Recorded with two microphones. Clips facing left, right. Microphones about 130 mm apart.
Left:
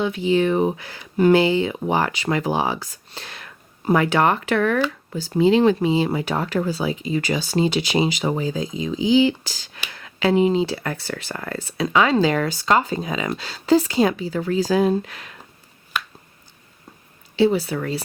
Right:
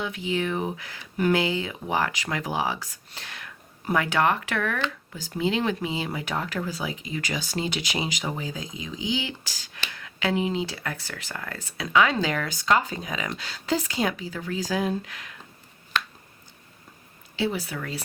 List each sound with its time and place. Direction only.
0.0 s speech: 30° left (ahead or behind)
15.9 s finger snapping: 10° left (ahead or behind)
17.3 s speech: 30° left (ahead or behind)